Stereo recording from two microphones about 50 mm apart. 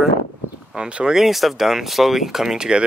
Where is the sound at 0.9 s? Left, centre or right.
Right.